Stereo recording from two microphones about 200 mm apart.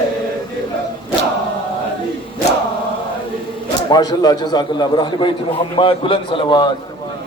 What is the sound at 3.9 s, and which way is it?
A man's voice, 20° left (ahead or behind).